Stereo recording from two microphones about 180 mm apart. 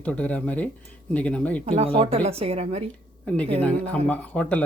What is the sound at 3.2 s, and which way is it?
Speech, 5° left (ahead or behind).